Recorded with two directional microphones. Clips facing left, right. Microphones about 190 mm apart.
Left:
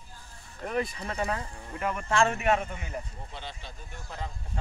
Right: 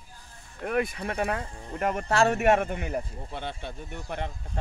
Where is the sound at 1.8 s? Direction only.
40° right (ahead or behind); by 4.3 s 65° right (ahead or behind).